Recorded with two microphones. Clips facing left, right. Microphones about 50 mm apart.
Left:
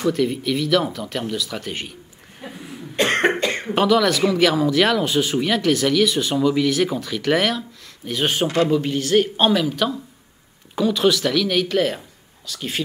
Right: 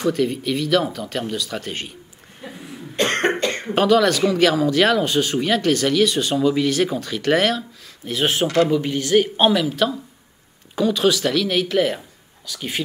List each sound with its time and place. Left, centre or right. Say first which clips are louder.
0.0 s speech: even; centre
2.4 s cough: even; centre
3.0 s cough: left 1 dB; centre
3.6 s speech: right 1 dB; centre